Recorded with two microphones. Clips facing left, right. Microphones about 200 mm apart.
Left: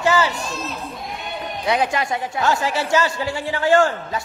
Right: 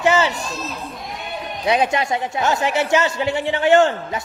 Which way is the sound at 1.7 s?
20° right (ahead or behind).